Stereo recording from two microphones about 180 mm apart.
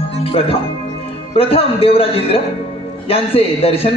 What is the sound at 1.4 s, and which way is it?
A man's voice, 30° left (ahead or behind).